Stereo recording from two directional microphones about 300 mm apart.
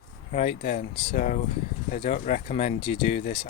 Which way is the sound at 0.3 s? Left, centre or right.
Left.